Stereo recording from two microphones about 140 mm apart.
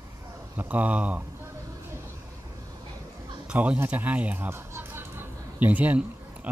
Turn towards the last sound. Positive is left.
turn(degrees=-10)  # may be behind; listen again after turning